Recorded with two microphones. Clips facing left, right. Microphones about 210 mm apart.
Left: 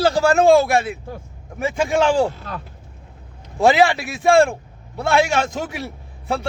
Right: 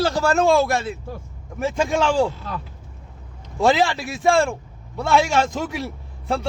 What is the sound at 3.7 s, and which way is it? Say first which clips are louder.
A man's voice: left 3 dB; 65° left (ahead or behind).